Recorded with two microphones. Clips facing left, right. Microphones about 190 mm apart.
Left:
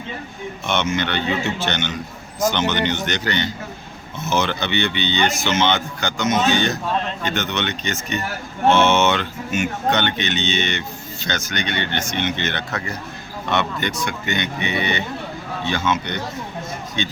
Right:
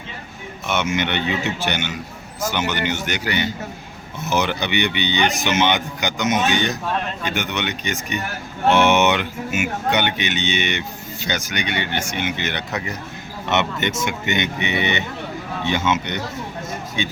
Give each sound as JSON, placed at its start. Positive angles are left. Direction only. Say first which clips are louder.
{"t": 0.7, "sound": "speech", "louder": "even", "side_deg": -10}